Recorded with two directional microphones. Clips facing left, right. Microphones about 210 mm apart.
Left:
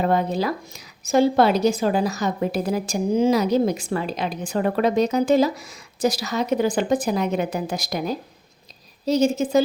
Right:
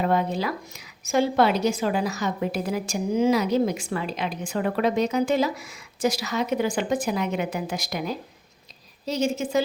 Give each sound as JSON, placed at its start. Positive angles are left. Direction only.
{"t": 0.0, "sound": "a woman's voice", "side_deg": 40}